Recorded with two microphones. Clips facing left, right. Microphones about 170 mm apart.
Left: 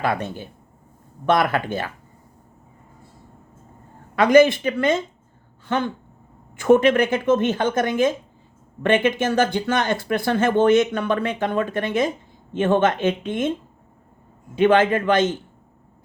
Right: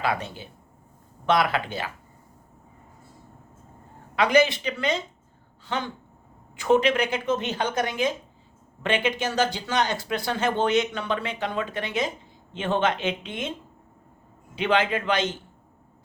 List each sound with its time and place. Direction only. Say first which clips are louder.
0.0 s speech: left 4 dB; 50° left (ahead or behind)
4.1 s speech: left 6 dB; 50° left (ahead or behind)
14.5 s speech: left 7 dB; 50° left (ahead or behind)